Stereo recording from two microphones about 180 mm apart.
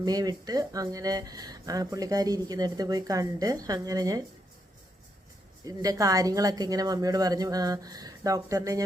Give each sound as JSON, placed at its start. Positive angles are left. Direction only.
{"t": 0.0, "sound": "speech", "side_deg": -20}
{"t": 5.6, "sound": "speech", "side_deg": -20}